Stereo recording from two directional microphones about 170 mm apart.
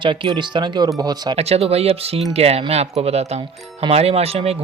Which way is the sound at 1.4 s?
35° right (ahead or behind).